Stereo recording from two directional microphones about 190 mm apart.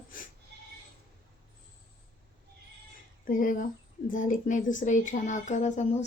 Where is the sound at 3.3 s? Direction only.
45° left (ahead or behind).